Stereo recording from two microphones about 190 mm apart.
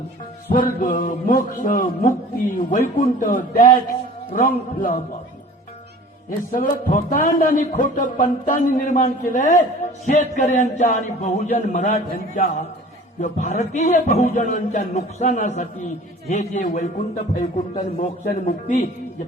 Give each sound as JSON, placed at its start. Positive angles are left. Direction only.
{"t": 0.4, "sound": "a man's voice", "side_deg": 50}
{"t": 6.5, "sound": "a man's voice", "side_deg": 45}